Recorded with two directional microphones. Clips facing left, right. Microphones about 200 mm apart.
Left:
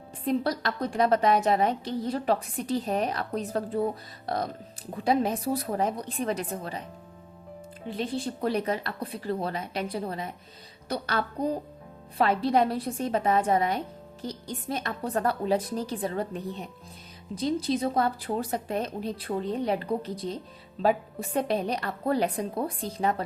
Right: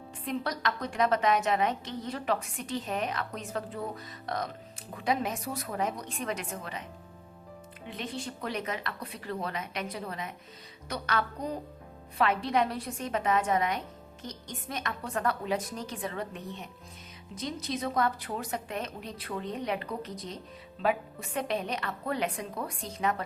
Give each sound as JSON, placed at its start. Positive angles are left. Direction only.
{"t": 0.3, "sound": "a woman's voice", "side_deg": 30}
{"t": 7.9, "sound": "a woman's voice", "side_deg": 30}